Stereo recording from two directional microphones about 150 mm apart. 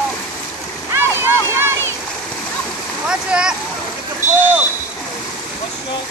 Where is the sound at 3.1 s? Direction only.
5° right (ahead or behind).